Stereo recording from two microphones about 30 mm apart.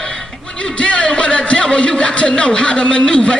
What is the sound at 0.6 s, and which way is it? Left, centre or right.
A man's voice, left.